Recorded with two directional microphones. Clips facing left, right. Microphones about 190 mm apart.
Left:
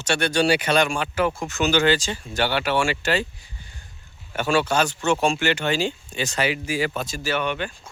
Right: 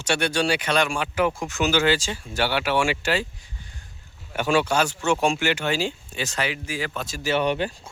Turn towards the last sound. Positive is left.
turn(degrees=-35)  # may be behind; listen again after turning